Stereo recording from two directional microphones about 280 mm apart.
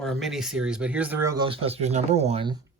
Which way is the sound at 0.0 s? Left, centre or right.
Centre.